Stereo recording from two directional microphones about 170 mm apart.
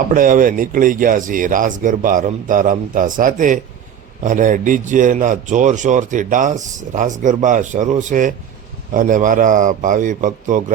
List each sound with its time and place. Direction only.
0.1 s a man's voice: 50° right (ahead or behind)